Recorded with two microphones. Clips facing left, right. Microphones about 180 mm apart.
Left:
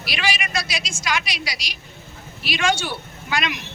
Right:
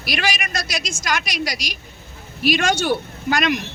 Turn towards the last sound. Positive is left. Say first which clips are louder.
# right 6 dB
turn(degrees=-45)  # may be behind; listen again after turning